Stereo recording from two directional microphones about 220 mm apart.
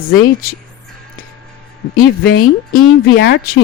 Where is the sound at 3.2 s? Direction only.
50° left (ahead or behind).